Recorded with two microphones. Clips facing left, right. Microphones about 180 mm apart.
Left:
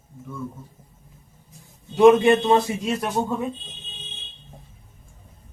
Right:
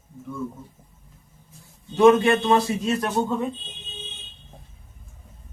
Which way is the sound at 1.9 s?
15° left (ahead or behind).